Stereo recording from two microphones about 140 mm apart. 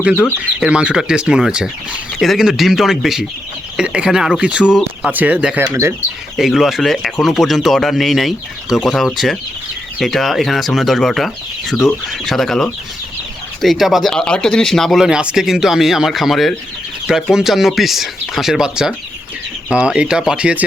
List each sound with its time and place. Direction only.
0.0 s speech: 10° right (ahead or behind)
6.3 s speech: centre (ahead or behind)